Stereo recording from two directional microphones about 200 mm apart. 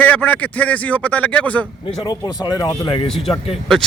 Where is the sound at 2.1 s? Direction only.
20° left (ahead or behind).